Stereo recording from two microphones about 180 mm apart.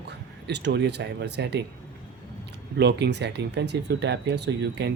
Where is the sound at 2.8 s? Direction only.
70° right (ahead or behind).